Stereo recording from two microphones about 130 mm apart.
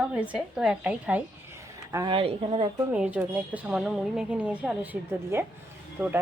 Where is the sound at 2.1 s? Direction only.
40° right (ahead or behind).